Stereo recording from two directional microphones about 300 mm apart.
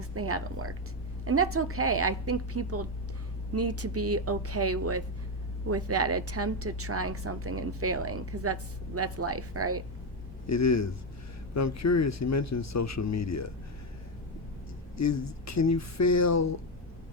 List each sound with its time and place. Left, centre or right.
0.0 s a woman's voice: right
10.4 s speech: left
14.9 s speech: left